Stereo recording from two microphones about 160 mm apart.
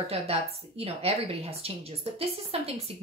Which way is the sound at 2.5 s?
40° right (ahead or behind).